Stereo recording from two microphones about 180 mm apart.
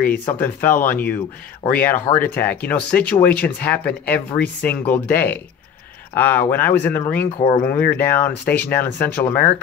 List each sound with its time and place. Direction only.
0.3 s speech: 10° left (ahead or behind)
7.3 s speech: 25° left (ahead or behind)
7.6 s speech: 10° left (ahead or behind)